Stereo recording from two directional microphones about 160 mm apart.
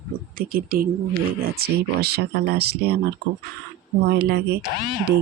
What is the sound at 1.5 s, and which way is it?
Speech, 80° right.